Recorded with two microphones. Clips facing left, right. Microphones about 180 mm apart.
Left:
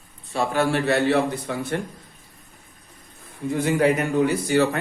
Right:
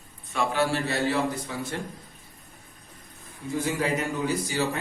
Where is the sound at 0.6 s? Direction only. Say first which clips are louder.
Left 7 dB; 60° left (ahead or behind).